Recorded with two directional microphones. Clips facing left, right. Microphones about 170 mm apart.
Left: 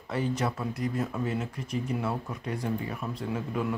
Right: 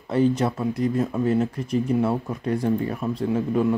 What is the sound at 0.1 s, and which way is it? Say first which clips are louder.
Speech: right 9 dB; 25° right (ahead or behind).